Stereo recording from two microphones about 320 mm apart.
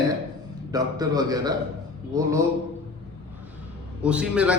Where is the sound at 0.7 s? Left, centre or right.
Centre.